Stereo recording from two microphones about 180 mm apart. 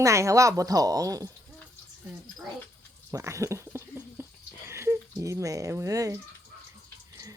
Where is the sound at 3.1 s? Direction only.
15° right (ahead or behind).